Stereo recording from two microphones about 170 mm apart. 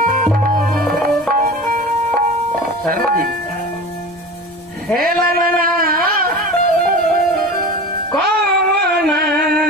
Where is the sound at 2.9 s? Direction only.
55° right (ahead or behind).